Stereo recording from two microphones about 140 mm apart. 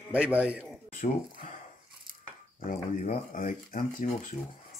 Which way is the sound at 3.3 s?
65° left (ahead or behind).